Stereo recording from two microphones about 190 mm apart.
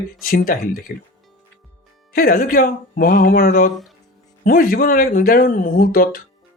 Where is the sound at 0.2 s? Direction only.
50° left (ahead or behind).